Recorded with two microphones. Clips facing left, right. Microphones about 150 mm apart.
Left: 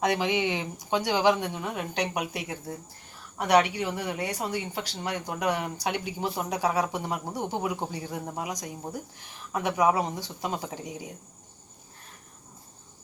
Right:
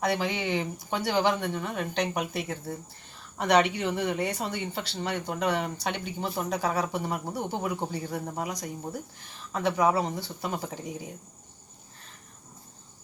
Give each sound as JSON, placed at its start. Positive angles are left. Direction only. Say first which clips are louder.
{"t": 0.0, "sound": "speech", "louder": "left 2 dB", "side_deg": 15}